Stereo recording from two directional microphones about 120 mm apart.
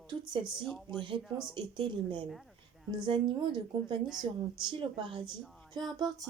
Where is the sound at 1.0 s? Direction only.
45° right (ahead or behind).